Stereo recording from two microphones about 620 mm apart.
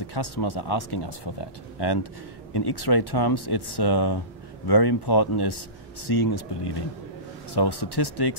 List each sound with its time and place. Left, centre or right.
0.0 s speech: left